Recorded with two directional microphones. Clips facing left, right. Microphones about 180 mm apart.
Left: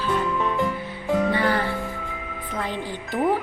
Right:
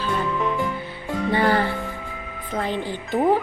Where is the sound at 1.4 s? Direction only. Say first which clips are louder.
Right 3 dB; 30° right (ahead or behind).